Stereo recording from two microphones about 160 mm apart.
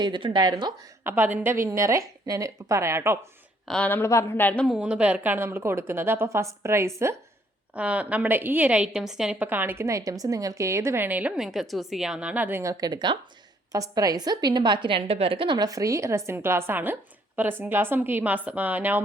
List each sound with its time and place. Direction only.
0.0 s a woman's voice: 30° right (ahead or behind)
1.0 s a woman's voice: 10° right (ahead or behind)
3.7 s a woman's voice: 10° left (ahead or behind)
4.7 s a woman's voice: 5° right (ahead or behind)